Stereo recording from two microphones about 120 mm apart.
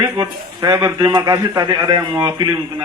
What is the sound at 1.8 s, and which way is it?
Speech, 35° right (ahead or behind).